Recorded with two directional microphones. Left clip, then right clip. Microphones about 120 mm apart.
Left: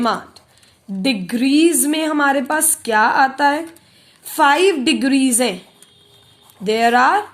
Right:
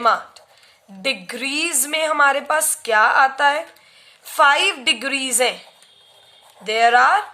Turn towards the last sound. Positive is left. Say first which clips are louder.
# even
turn(degrees=0)  # may be behind; listen again after turning